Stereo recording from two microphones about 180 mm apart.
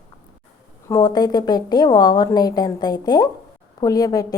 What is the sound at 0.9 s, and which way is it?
A woman's voice, 20° left (ahead or behind).